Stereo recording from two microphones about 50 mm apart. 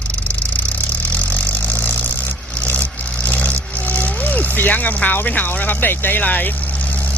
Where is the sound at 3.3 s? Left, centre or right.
Left.